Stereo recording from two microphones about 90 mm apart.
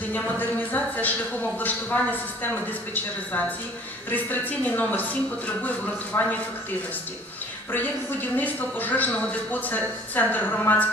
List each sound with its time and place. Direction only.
0.1 s a man's voice: 20° left (ahead or behind)
6.1 s a man's voice: 30° left (ahead or behind)
7.7 s a man's voice: 20° left (ahead or behind)